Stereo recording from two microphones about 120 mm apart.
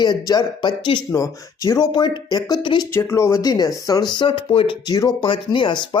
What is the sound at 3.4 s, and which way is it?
Speech, 35° left (ahead or behind).